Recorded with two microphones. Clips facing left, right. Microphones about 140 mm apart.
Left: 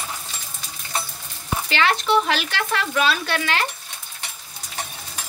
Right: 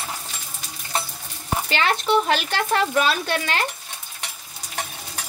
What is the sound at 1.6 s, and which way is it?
Speech, 45° right (ahead or behind).